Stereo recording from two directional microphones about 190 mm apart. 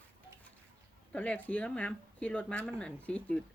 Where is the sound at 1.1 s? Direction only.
10° left (ahead or behind).